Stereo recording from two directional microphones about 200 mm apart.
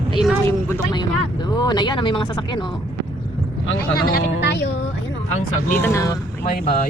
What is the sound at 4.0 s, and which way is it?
Speech, 50° left (ahead or behind).